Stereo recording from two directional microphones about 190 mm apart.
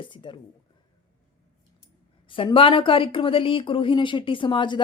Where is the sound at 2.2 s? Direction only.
25° left (ahead or behind).